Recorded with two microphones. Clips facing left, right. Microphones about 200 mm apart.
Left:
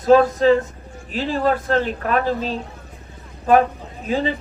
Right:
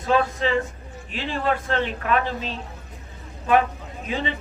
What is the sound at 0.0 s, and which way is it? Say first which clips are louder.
Speech: left 8 dB; 40° left (ahead or behind).